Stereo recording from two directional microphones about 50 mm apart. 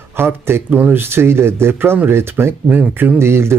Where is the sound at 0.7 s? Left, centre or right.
Right.